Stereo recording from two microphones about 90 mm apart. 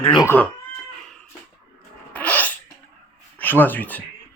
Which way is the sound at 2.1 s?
20° left (ahead or behind).